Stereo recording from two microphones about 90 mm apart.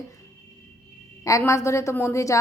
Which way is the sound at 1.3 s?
35° left (ahead or behind).